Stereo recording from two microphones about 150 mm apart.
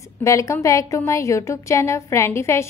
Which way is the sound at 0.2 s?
20° left (ahead or behind).